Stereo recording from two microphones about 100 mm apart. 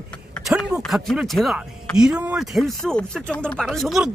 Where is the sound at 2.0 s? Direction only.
10° right (ahead or behind).